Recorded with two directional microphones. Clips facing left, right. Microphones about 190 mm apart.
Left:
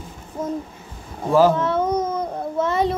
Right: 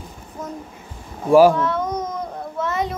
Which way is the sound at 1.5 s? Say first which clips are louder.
Even; 30° left (ahead or behind).